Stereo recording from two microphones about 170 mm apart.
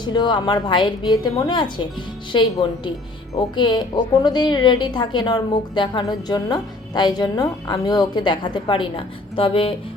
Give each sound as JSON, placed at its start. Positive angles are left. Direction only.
{"t": 0.0, "sound": "a woman's voice", "side_deg": 25}